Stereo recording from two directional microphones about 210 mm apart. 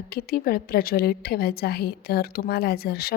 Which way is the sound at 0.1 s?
45° left (ahead or behind).